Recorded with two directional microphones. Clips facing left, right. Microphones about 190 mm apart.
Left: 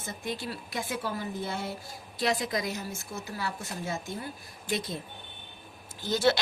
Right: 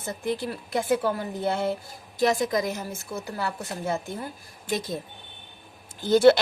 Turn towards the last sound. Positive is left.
turn(degrees=-55)  # may be behind; listen again after turning